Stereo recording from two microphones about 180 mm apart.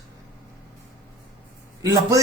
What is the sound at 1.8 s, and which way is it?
Speech, 20° right (ahead or behind).